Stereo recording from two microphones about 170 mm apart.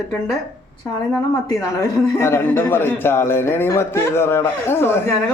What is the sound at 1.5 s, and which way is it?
A man's voice, 20° left (ahead or behind).